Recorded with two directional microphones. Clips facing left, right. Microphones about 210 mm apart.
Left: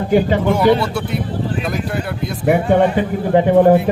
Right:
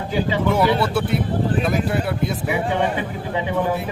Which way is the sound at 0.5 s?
5° right (ahead or behind).